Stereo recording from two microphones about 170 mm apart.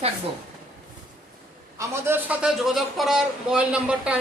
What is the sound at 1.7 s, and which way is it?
A man's voice, 15° right (ahead or behind).